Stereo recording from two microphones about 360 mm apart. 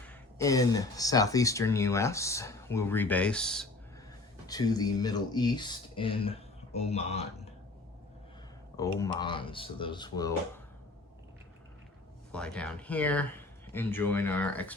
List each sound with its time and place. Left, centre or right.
0.1 s speech: centre
8.7 s speech: centre
12.3 s speech: centre